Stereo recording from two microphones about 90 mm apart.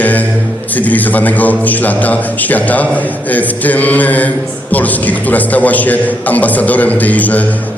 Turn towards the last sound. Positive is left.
turn(degrees=15)  # may be behind; listen again after turning